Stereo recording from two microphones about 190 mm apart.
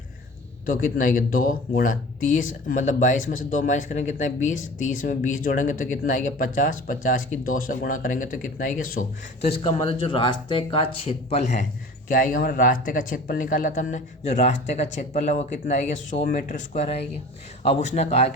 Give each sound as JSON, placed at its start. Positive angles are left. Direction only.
{"t": 0.6, "sound": "speech", "side_deg": 45}
{"t": 12.0, "sound": "speech", "side_deg": 45}